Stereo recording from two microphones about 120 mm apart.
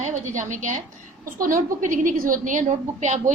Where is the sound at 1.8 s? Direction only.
90° right.